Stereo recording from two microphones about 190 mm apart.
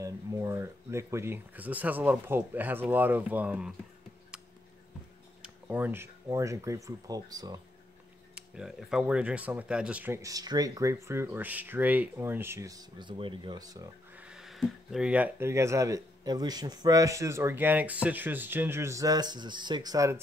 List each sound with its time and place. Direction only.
0.0 s speech: 15° right (ahead or behind)
4.3 s a sound: 5° right (ahead or behind)
5.4 s speech: 10° right (ahead or behind)
8.4 s speech: 5° right (ahead or behind); by 13.8 s 20° right (ahead or behind)
14.1 s speech: 5° right (ahead or behind)